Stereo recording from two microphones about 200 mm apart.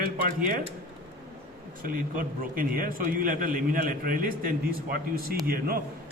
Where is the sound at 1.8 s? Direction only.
45° right (ahead or behind).